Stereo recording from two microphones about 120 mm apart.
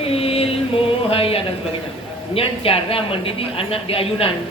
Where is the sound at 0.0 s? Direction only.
55° left (ahead or behind).